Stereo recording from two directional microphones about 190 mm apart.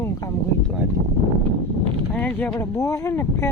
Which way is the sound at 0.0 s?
15° left (ahead or behind).